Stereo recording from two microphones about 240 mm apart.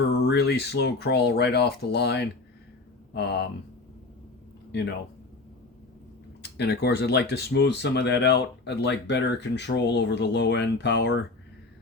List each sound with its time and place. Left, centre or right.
0.0 s speech: left
6.4 s speech: left